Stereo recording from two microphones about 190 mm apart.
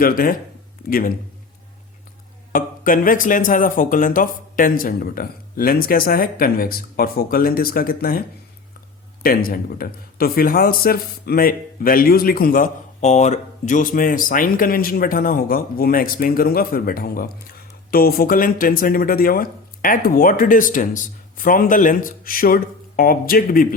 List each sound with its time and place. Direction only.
0.0 s a man's voice: 50° left (ahead or behind)
2.5 s a man's voice: 45° left (ahead or behind)
9.2 s a man's voice: 50° left (ahead or behind)